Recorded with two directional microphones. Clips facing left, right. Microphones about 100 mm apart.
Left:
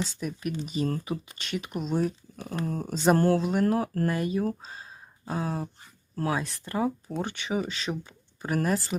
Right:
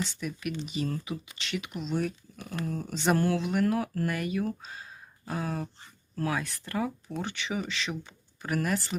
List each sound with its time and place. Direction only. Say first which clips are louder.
0.2 s speech: left 2 dB; 35° left (ahead or behind)
5.2 s a sound: left 2 dB; 25° left (ahead or behind)
6.1 s speech: left 2 dB; 30° left (ahead or behind)
7.2 s speech: left 3 dB; 45° left (ahead or behind)